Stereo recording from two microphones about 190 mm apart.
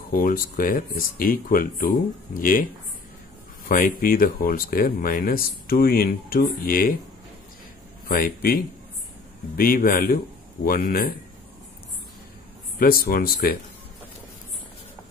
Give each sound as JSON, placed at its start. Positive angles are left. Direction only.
{"t": 0.1, "sound": "speech", "side_deg": 45}
{"t": 3.6, "sound": "speech", "side_deg": 45}
{"t": 8.1, "sound": "speech", "side_deg": 50}
{"t": 9.6, "sound": "speech", "side_deg": 50}
{"t": 12.7, "sound": "speech", "side_deg": 50}